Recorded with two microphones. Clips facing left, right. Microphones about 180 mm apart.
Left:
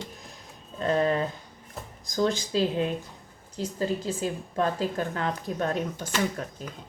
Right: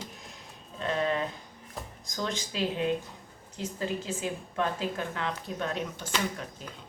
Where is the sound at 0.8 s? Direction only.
40° left (ahead or behind).